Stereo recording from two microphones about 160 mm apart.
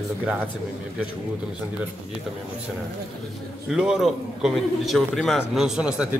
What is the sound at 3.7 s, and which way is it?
A man's voice, 5° right (ahead or behind).